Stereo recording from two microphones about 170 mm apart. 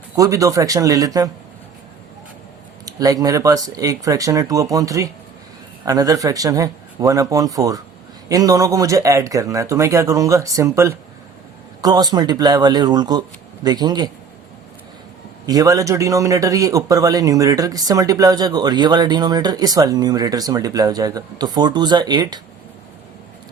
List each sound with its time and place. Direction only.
0.2 s speech: 20° right (ahead or behind)
2.8 s speech: 20° right (ahead or behind)
15.4 s speech: 20° right (ahead or behind)